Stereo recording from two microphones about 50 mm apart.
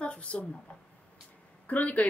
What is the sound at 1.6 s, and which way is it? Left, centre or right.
Speech, left.